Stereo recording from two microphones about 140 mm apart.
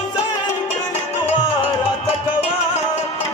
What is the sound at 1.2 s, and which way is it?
Music, 45° left (ahead or behind).